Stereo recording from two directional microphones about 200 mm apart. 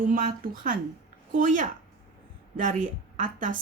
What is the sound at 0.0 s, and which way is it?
A woman's voice, 45° right (ahead or behind).